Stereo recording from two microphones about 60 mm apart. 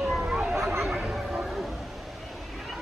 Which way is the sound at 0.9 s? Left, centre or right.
Centre.